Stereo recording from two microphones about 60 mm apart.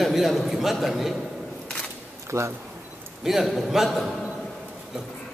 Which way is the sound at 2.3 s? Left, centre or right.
Right.